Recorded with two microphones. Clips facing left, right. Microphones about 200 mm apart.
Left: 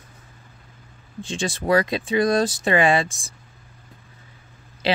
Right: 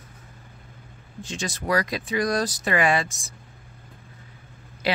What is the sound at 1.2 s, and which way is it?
Speech, 30° left (ahead or behind).